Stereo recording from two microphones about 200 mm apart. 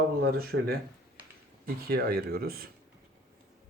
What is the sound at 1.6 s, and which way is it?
Speech, 50° right (ahead or behind).